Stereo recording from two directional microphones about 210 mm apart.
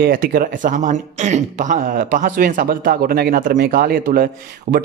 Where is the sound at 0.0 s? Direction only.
45° right (ahead or behind).